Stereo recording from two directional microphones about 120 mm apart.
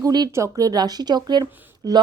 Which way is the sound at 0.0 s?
35° right (ahead or behind).